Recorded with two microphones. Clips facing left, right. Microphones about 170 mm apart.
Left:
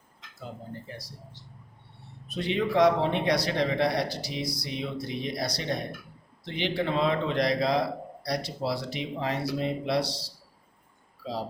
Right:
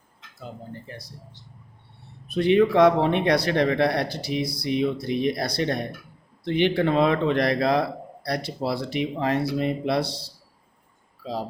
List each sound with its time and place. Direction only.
2.2 s a man's voice: 60° right (ahead or behind)